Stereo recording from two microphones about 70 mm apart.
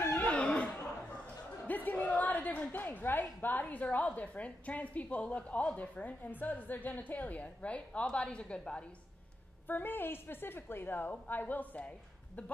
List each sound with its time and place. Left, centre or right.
0.0 s chuckle: left
0.3 s chuckle: centre
1.2 s a sound: left
3.3 s a woman's voice: left
9.7 s a woman's voice: left